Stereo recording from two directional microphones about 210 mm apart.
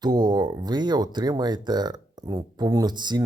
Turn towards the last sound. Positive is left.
turn(degrees=-20)  # may be behind; listen again after turning